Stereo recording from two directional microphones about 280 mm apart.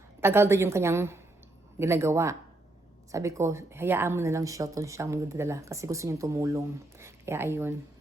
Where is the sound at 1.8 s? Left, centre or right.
Centre.